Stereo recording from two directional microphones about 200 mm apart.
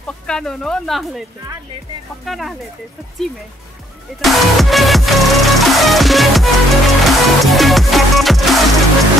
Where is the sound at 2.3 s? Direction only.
Centre (ahead or behind).